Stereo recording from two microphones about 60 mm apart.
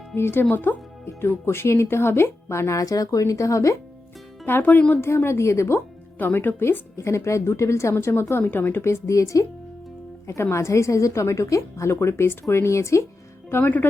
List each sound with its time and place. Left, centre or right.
0.2 s speech: left
1.0 s speech: left
4.4 s speech: left
4.9 s speech: left
6.1 s speech: left
6.9 s speech: left
8.8 s a woman's voice: left
10.5 s a woman's voice: left
11.9 s speech: left
13.5 s speech: left